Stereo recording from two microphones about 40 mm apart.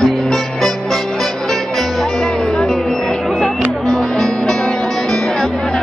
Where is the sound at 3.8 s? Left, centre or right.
Centre.